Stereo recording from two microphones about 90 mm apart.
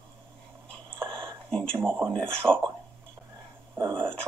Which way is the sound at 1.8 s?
25° right (ahead or behind).